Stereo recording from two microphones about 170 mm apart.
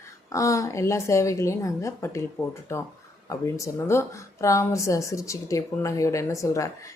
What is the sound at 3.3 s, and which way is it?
A woman's voice, 20° left (ahead or behind).